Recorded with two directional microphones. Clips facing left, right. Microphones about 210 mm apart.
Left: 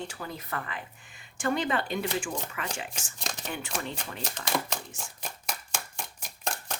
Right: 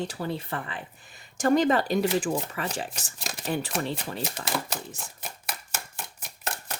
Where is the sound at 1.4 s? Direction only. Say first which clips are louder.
Right 7 dB; 40° right (ahead or behind).